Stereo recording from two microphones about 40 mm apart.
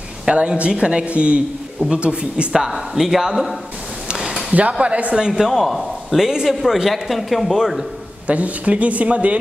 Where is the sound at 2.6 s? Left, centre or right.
Centre.